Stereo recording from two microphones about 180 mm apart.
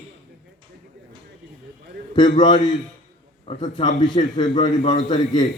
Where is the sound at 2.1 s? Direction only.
25° left (ahead or behind).